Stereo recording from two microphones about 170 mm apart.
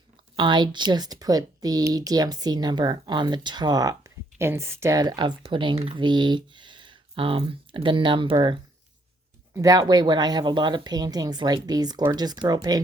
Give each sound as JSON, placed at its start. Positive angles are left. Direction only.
{"t": 0.3, "sound": "speech", "side_deg": -25}
{"t": 9.6, "sound": "speech", "side_deg": -20}